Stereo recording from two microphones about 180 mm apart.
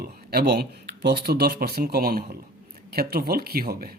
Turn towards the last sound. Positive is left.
turn(degrees=-55)  # may be behind; listen again after turning